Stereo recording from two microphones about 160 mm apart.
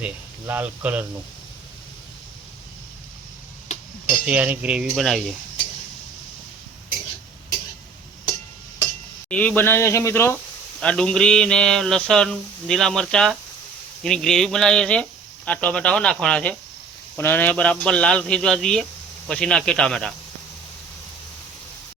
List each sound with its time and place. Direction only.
0.0 s speech: 10° right (ahead or behind)
4.3 s speech: 10° right (ahead or behind)
9.3 s speech: 10° left (ahead or behind)
10.8 s a sound: 5° left (ahead or behind)
15.4 s speech: 10° left (ahead or behind)
19.3 s a sound: 5° left (ahead or behind)